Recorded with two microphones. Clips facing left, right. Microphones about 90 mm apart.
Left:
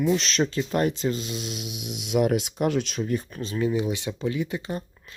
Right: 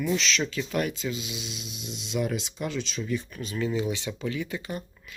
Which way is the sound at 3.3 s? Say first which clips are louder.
Left 3 dB; 30° left (ahead or behind).